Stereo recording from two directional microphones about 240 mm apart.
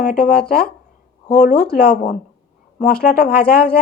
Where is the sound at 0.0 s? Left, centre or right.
Left.